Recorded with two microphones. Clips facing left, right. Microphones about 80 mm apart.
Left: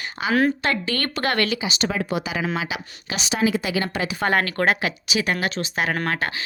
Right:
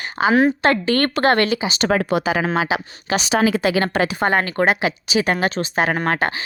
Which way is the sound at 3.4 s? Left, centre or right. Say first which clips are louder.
Right 2 dB; right.